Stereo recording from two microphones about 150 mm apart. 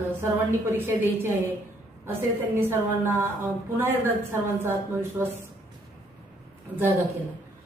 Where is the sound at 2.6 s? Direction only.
15° right (ahead or behind).